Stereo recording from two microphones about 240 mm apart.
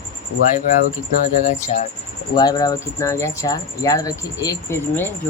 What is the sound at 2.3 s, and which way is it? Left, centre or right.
Speech, centre.